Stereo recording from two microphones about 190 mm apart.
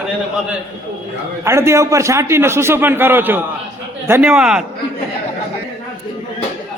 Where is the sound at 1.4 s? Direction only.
15° right (ahead or behind).